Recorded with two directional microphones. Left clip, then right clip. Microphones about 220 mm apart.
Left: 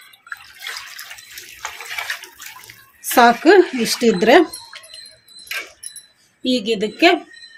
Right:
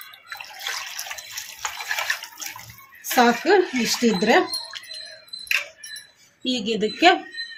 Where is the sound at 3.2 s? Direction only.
50° left (ahead or behind).